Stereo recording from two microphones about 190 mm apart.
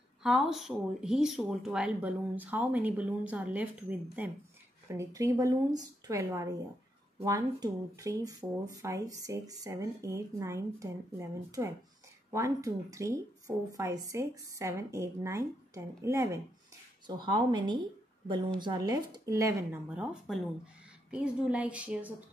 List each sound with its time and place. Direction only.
0.2 s speech: centre (ahead or behind)
20.0 s speech: 5° right (ahead or behind)